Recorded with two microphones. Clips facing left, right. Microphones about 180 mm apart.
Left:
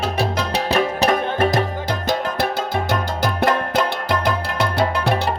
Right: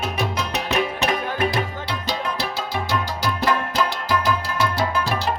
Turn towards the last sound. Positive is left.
turn(degrees=60)  # may be behind; listen again after turning